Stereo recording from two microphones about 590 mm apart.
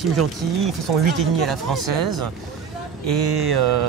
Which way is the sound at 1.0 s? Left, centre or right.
Right.